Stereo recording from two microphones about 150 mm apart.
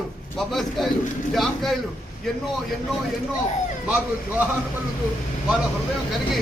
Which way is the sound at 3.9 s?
10° right (ahead or behind).